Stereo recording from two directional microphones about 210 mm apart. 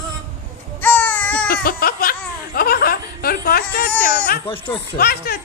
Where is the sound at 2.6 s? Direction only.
45° left (ahead or behind).